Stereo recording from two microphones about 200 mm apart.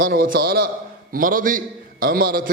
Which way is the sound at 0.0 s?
50° right (ahead or behind).